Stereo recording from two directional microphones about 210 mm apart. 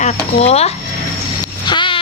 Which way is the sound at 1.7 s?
20° left (ahead or behind).